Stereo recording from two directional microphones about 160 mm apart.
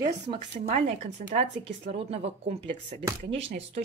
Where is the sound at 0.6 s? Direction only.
45° right (ahead or behind).